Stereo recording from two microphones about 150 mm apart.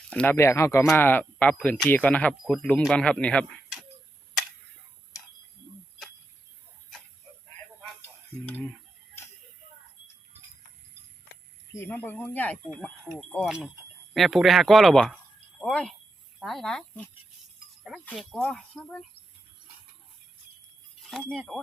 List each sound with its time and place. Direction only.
0.1 s speech: 10° left (ahead or behind)
0.3 s speech: 20° left (ahead or behind)
8.4 s speech: 10° left (ahead or behind)
11.7 s speech: 15° left (ahead or behind)
18.2 s speech: centre (ahead or behind)
21.2 s speech: 5° left (ahead or behind)